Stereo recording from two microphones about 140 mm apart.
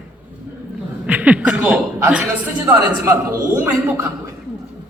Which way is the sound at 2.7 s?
20° right (ahead or behind).